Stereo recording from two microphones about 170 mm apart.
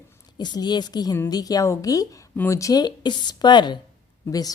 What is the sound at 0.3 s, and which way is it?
A woman's voice, 25° left (ahead or behind).